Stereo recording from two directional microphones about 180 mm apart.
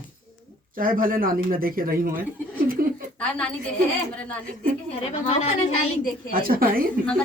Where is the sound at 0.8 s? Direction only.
50° right (ahead or behind).